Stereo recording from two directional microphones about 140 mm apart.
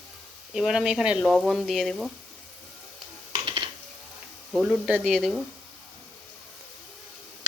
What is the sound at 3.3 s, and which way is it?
Computer keyboard, 35° right (ahead or behind).